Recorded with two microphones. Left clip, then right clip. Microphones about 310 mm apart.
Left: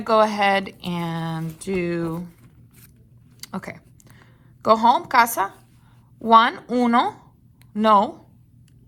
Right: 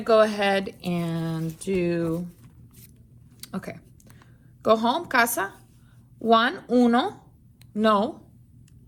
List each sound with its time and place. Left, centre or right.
0.0 s speech: left
3.4 s a sound: left
4.7 s speech: left